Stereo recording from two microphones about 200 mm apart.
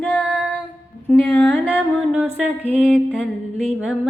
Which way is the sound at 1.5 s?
5° right (ahead or behind).